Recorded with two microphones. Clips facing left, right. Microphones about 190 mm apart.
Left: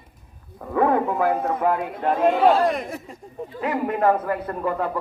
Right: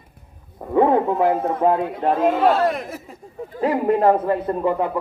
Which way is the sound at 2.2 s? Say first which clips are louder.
Left 1 dB; centre (ahead or behind).